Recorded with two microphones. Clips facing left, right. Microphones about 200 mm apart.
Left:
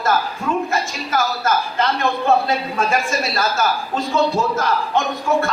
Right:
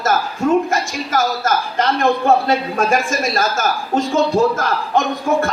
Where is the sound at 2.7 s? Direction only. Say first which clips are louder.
Right 3 dB; 50° right (ahead or behind).